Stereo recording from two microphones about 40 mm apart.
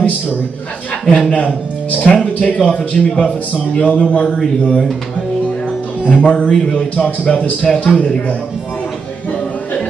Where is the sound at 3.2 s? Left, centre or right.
Centre.